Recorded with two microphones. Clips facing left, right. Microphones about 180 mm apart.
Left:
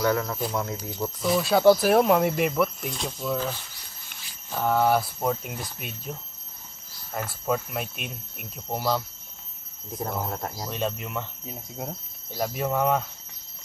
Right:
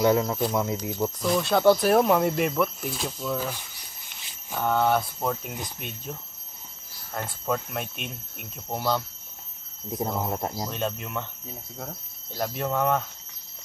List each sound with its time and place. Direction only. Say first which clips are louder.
0.0 s speech: right 3 dB; 20° right (ahead or behind)
1.2 s speech: left 2 dB; 5° left (ahead or behind)
4.6 s speech: left 1 dB; 5° left (ahead or behind)
7.2 s speech: left 1 dB; 5° left (ahead or behind)
10.1 s speech: right 2 dB; 15° right (ahead or behind)
10.7 s speech: left 1 dB; centre (ahead or behind)
11.4 s speech: left 3 dB; 15° left (ahead or behind)
12.4 s speech: left 1 dB; 5° left (ahead or behind)